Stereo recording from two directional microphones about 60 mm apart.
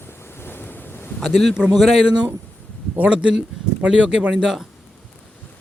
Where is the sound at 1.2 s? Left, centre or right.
Centre.